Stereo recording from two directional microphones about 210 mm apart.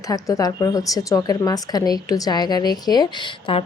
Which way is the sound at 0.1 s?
15° left (ahead or behind).